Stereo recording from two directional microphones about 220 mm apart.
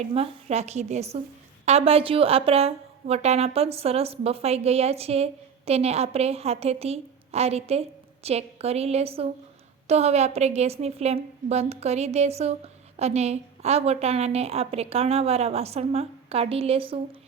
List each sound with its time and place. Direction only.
0.0 s a woman's voice: 30° right (ahead or behind)